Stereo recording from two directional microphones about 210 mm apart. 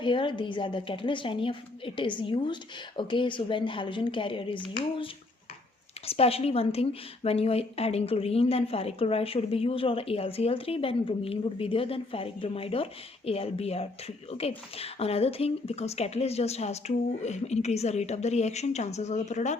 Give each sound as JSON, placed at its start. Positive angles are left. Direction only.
{"t": 0.0, "sound": "a woman's voice", "side_deg": 25}
{"t": 6.1, "sound": "a woman's voice", "side_deg": 30}